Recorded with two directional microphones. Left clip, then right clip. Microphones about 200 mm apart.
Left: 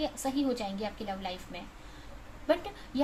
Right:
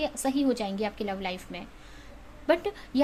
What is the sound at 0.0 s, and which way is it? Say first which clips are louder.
A woman's voice: right 4 dB; 50° right (ahead or behind).